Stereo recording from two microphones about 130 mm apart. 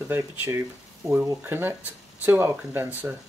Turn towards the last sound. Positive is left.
turn(degrees=-15)  # may be behind; listen again after turning